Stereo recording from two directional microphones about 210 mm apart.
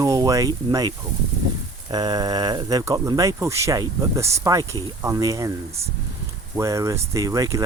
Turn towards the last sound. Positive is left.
turn(degrees=-15)  # may be behind; listen again after turning